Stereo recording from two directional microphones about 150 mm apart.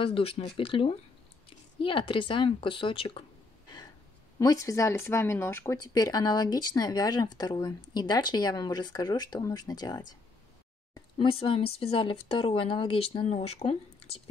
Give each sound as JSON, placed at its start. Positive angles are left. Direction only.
{"t": 0.0, "sound": "speech", "side_deg": 35}
{"t": 4.4, "sound": "speech", "side_deg": 20}
{"t": 11.1, "sound": "speech", "side_deg": 40}